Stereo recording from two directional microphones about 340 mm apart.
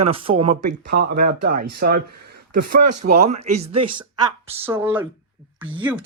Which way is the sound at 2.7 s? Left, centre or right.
Right.